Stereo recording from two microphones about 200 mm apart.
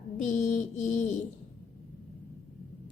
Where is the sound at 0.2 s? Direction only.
40° left (ahead or behind).